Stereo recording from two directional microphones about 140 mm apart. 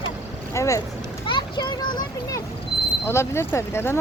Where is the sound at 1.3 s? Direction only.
35° left (ahead or behind).